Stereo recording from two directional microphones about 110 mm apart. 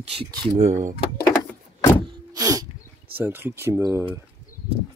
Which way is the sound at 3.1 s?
20° right (ahead or behind).